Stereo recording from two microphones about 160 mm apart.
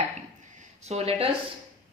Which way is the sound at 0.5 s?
45° right (ahead or behind).